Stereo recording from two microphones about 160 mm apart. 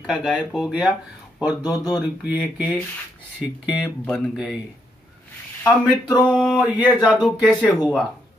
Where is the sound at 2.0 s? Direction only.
5° right (ahead or behind).